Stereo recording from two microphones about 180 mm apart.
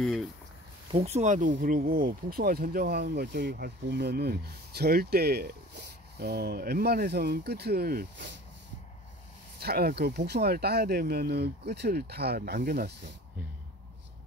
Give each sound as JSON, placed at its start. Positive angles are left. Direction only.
{"t": 0.0, "sound": "speech", "side_deg": 0}
{"t": 0.9, "sound": "speech", "side_deg": -35}
{"t": 9.6, "sound": "speech", "side_deg": -60}